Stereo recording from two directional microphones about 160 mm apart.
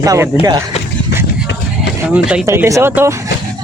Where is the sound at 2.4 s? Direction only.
20° right (ahead or behind).